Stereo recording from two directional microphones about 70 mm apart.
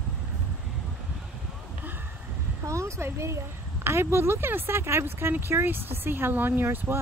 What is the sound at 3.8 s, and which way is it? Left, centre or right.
Speech, right.